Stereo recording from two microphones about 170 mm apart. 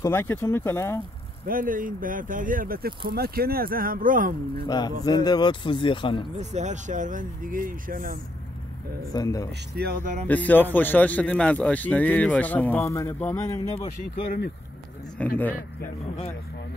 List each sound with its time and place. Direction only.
0.0 s speech: 10° left (ahead or behind)
1.5 s speech: 55° right (ahead or behind)
4.6 s speech: 25° left (ahead or behind)
6.3 s speech: 45° right (ahead or behind)
9.1 s speech: 20° left (ahead or behind)
9.8 s speech: 60° right (ahead or behind)
10.2 s speech: 10° left (ahead or behind)
15.1 s speech: 10° left (ahead or behind)